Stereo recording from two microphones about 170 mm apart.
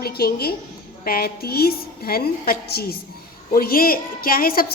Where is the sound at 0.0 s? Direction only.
65° left (ahead or behind).